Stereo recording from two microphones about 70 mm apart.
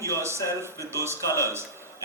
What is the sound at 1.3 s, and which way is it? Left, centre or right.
Speech, left.